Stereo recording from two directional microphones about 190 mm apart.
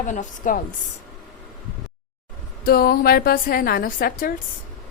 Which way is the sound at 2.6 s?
50° left (ahead or behind).